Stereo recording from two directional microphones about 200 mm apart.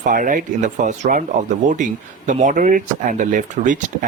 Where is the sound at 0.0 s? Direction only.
40° right (ahead or behind).